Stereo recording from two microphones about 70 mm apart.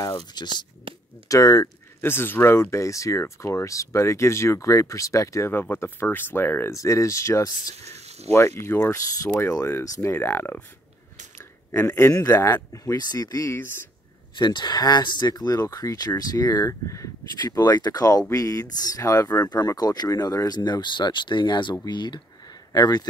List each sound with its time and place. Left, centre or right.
0.2 s speech: left
1.3 s speech: left
2.0 s speech: left
5.5 s speech: left
6.7 s speech: left
10.1 s speech: left
11.7 s speech: left
12.1 s speech: left
14.3 s speech: left
17.4 s speech: left